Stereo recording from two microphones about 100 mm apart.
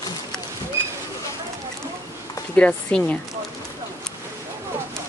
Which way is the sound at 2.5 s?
15° left (ahead or behind).